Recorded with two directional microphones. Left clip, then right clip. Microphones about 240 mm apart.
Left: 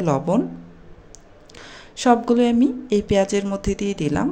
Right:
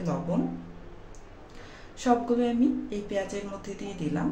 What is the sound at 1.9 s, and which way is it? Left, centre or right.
Speech, left.